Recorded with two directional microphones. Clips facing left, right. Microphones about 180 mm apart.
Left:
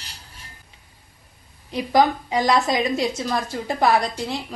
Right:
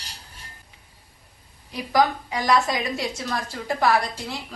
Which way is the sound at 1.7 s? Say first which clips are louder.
Left 3 dB; 25° left (ahead or behind).